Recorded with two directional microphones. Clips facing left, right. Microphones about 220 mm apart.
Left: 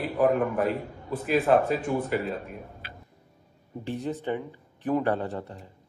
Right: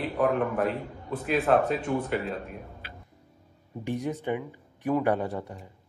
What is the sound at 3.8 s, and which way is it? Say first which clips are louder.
Speech: right 1 dB; 15° right (ahead or behind).